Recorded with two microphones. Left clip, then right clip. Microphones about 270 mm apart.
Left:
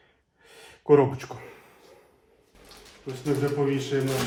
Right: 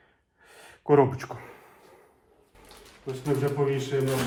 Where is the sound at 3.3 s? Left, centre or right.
Centre.